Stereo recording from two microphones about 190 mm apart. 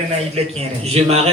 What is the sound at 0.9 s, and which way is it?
Speech, 35° right (ahead or behind).